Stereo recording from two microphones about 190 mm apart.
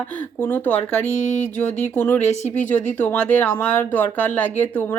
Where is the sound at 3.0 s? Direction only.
10° left (ahead or behind).